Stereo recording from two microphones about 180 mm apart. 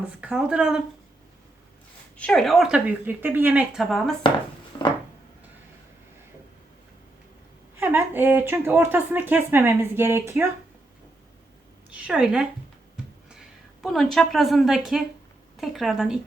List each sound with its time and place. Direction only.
0.2 s speech: 5° right (ahead or behind)
2.1 s speech: 5° left (ahead or behind)
4.7 s a sound: 25° left (ahead or behind)
7.8 s speech: 10° right (ahead or behind)
12.0 s speech: 5° right (ahead or behind)
13.8 s speech: centre (ahead or behind)